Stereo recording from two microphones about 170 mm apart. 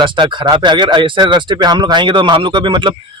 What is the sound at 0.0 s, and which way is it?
Speech, 30° right (ahead or behind).